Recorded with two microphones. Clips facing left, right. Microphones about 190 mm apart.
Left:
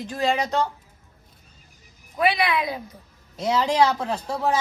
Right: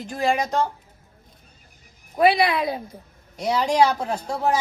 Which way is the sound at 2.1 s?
35° right (ahead or behind).